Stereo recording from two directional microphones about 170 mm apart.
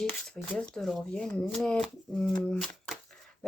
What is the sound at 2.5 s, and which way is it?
Shuffling cards, centre (ahead or behind).